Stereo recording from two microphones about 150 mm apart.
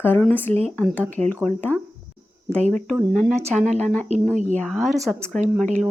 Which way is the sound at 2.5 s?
5° left (ahead or behind).